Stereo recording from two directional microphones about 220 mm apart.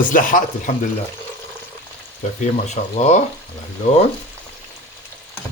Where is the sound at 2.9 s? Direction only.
30° left (ahead or behind).